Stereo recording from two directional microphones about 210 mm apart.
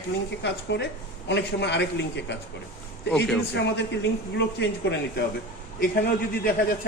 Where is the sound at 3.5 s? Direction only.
55° left (ahead or behind).